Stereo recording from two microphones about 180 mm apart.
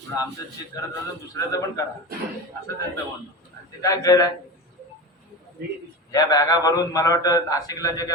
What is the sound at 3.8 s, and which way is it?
Speech, 20° left (ahead or behind).